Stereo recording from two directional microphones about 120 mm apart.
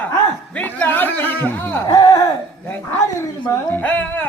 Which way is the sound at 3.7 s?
15° left (ahead or behind).